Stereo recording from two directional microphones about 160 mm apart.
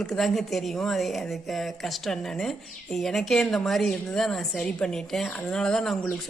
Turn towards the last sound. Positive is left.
turn(degrees=5)  # may be behind; listen again after turning